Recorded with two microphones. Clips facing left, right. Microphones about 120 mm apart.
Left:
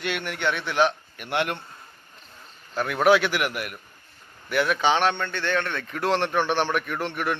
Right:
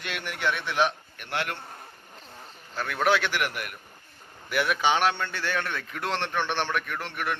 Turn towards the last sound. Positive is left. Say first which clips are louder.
# left 4 dB
turn(degrees=10)  # may be behind; listen again after turning